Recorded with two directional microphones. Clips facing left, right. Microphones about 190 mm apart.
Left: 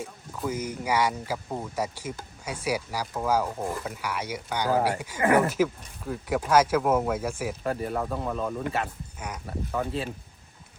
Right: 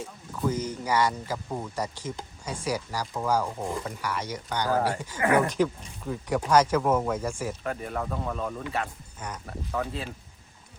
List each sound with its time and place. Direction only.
0.0 s speech: 10° left (ahead or behind)
7.6 s speech: 30° left (ahead or behind)
8.1 s speech: 5° left (ahead or behind)